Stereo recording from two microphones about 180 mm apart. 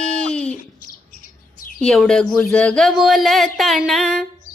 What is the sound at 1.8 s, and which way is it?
Speech, 5° left (ahead or behind).